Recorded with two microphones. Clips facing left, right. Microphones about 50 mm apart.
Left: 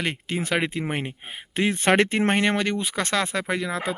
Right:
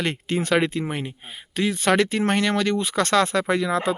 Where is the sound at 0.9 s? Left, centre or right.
Left.